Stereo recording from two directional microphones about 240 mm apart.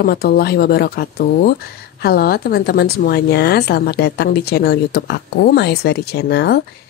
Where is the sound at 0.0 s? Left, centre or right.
Left.